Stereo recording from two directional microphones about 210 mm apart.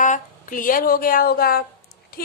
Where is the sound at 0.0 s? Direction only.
40° left (ahead or behind).